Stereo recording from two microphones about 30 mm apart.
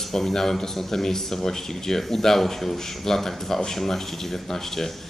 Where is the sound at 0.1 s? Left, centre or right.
Centre.